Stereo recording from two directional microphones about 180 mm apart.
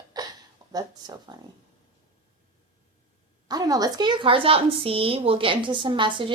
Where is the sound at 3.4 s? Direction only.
20° right (ahead or behind).